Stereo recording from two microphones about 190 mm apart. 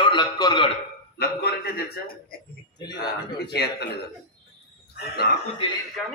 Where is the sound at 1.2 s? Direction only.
55° left (ahead or behind).